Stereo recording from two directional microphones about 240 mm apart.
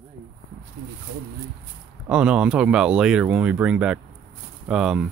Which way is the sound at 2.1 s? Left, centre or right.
Centre.